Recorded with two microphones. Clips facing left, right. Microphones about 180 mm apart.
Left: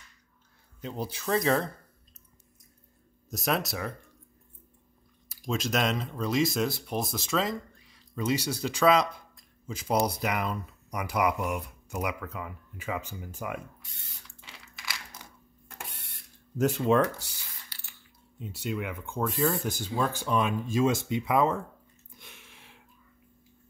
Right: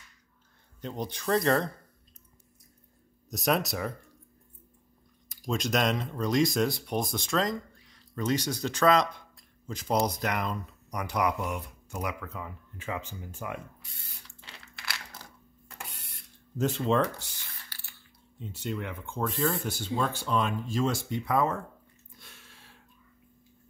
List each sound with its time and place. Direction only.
0.7 s speech: 5° left (ahead or behind)
3.3 s speech: centre (ahead or behind)
5.5 s speech: centre (ahead or behind)
16.5 s speech: 10° left (ahead or behind)
22.2 s a sound: 15° left (ahead or behind)